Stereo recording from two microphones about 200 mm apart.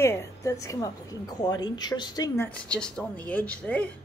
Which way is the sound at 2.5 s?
5° left (ahead or behind).